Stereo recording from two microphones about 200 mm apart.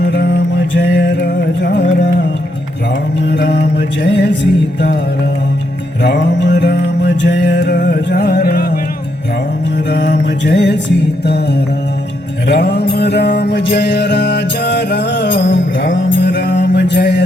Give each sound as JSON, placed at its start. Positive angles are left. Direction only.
{"t": 0.0, "sound": "music", "side_deg": 60}
{"t": 3.2, "sound": "music", "side_deg": 60}
{"t": 6.0, "sound": "music", "side_deg": 60}
{"t": 9.7, "sound": "music", "side_deg": 60}